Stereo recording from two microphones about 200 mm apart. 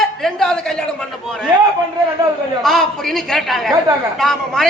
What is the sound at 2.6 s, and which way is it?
A man's voice, centre (ahead or behind).